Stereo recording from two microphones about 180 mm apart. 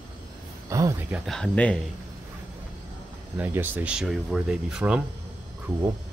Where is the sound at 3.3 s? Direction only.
10° right (ahead or behind).